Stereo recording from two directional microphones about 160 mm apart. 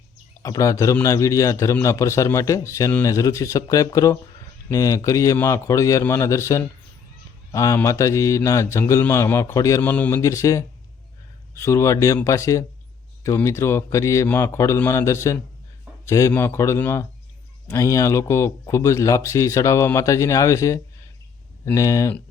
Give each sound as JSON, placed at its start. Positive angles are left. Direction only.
{"t": 0.4, "sound": "a man's voice", "side_deg": 20}